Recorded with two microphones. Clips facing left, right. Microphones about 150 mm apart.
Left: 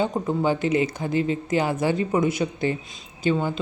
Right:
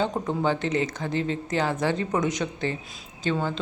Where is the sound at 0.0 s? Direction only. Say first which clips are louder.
Left 2 dB; 10° left (ahead or behind).